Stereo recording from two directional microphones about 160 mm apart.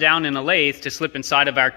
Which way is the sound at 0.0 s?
Centre (ahead or behind).